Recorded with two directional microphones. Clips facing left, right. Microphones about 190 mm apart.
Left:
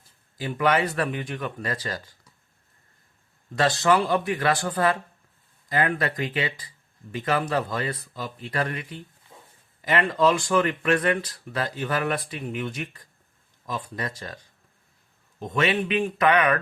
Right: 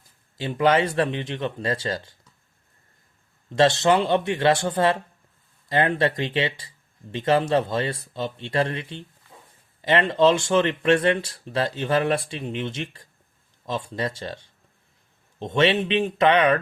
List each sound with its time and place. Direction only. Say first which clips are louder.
0.3 s speech: right 3 dB; 25° right (ahead or behind)
3.5 s speech: right 3 dB; 25° right (ahead or behind)